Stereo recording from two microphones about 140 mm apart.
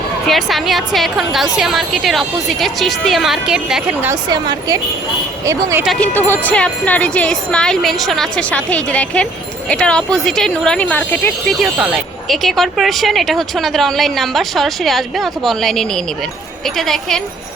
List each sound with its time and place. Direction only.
0.3 s speech: centre (ahead or behind)
4.1 s a woman's voice: 30° right (ahead or behind)
5.8 s speech: centre (ahead or behind)
6.1 s speech: 15° left (ahead or behind)
11.6 s speech: 5° right (ahead or behind)